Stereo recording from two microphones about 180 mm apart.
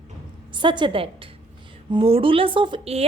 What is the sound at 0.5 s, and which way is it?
A woman's voice, 25° right (ahead or behind).